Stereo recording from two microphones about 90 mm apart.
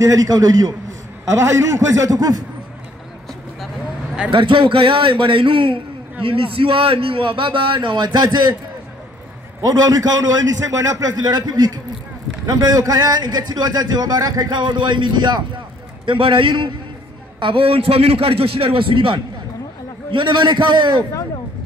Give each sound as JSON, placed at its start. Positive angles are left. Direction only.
{"t": 0.0, "sound": "a man's voice", "side_deg": -40}
{"t": 1.2, "sound": "a man's voice", "side_deg": -35}
{"t": 4.3, "sound": "a man's voice", "side_deg": -65}
{"t": 6.2, "sound": "a man's voice", "side_deg": -85}
{"t": 9.8, "sound": "a man's voice", "side_deg": -45}
{"t": 14.6, "sound": "a man's voice", "side_deg": -60}
{"t": 16.1, "sound": "a man's voice", "side_deg": -70}
{"t": 17.4, "sound": "a man's voice", "side_deg": -75}
{"t": 20.1, "sound": "a man's voice", "side_deg": -60}